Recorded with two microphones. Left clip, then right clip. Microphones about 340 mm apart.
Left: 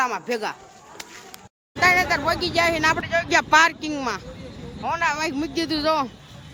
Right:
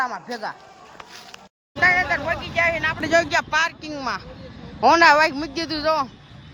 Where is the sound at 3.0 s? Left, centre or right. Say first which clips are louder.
Right 5 dB; centre.